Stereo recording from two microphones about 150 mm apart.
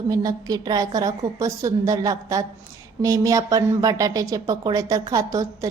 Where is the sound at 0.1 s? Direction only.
25° right (ahead or behind).